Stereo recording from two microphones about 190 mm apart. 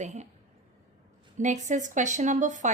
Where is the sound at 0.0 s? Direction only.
40° right (ahead or behind).